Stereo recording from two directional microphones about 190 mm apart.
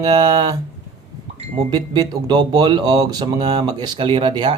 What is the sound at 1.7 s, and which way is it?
Speech, 20° right (ahead or behind).